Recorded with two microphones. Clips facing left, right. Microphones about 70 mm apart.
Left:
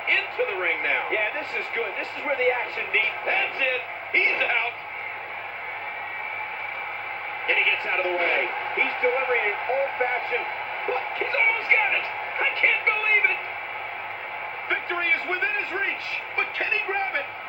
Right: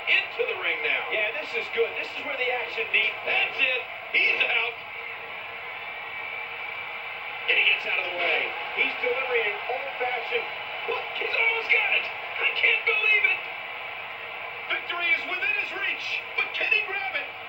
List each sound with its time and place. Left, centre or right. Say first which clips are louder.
0.1 s speech: left 2 dB; left
7.4 s a woman's voice: left 1 dB; left
10.9 s music: left 3 dB; left
14.7 s a sound: left 3 dB; left